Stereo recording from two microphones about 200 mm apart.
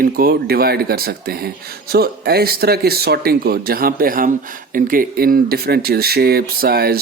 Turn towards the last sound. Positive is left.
turn(degrees=-50)  # may be behind; listen again after turning